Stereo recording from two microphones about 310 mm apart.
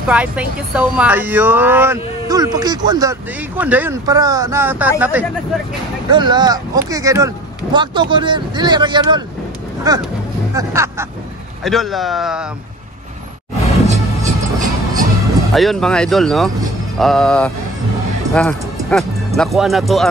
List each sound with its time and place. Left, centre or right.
0.1 s speech: centre
13.8 s music: right
15.5 s speech: centre